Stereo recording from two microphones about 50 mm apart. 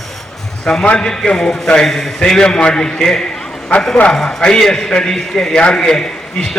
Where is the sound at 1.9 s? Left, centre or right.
Centre.